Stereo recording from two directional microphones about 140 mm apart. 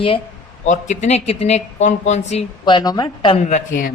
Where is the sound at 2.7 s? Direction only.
30° left (ahead or behind).